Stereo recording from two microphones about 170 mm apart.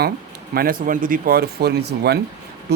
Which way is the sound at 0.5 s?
55° right (ahead or behind).